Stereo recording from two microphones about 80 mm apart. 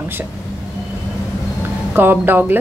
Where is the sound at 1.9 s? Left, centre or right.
Right.